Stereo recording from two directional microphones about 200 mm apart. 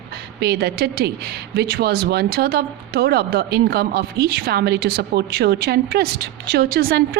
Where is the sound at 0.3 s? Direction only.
50° right (ahead or behind).